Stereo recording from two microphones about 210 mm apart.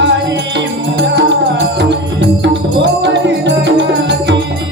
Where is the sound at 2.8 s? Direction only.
55° right (ahead or behind).